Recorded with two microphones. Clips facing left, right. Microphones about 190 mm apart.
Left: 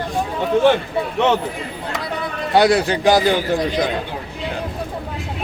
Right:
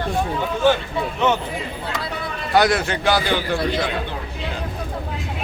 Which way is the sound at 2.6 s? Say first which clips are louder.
Left 3 dB; 30° left (ahead or behind).